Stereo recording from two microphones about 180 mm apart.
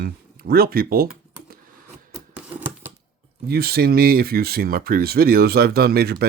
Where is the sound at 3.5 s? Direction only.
60° right (ahead or behind).